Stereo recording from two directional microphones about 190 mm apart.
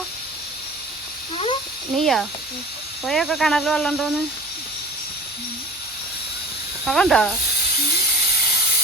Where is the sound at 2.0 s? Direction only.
Centre (ahead or behind).